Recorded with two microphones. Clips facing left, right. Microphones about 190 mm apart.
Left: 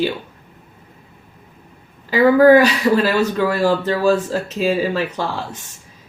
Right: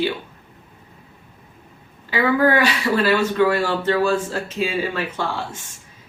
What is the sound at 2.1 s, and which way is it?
A man's voice, 45° left (ahead or behind).